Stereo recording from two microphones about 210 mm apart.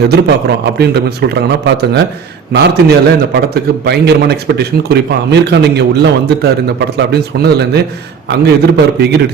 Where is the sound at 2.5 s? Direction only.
50° right (ahead or behind).